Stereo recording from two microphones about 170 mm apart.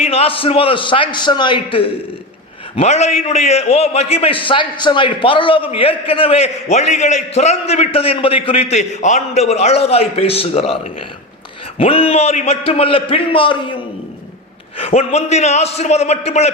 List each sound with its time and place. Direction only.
0.0 s a man's voice: 35° left (ahead or behind)
2.7 s a man's voice: 40° left (ahead or behind)
11.8 s a man's voice: 35° left (ahead or behind)
14.8 s a man's voice: 35° left (ahead or behind)